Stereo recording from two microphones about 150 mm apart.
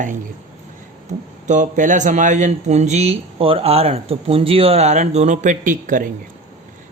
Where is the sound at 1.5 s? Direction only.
55° right (ahead or behind).